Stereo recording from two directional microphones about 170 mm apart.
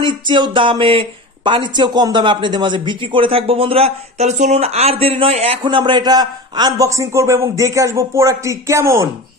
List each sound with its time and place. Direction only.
0.0 s speech: 30° right (ahead or behind)